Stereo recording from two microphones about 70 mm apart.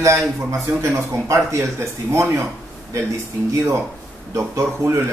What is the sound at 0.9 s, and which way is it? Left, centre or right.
Speech, right.